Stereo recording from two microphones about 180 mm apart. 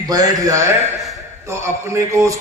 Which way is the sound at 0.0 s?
20° right (ahead or behind).